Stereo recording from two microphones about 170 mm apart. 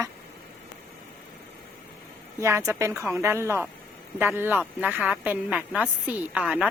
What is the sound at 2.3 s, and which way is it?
A woman's voice, 15° right (ahead or behind).